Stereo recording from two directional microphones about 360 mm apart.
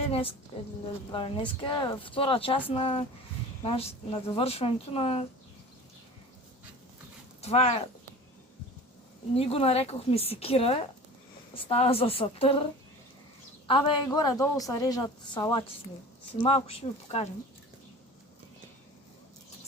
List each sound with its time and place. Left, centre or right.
0.1 s a woman's voice: centre
7.4 s a woman's voice: centre
9.3 s a woman's voice: centre
13.7 s a woman's voice: centre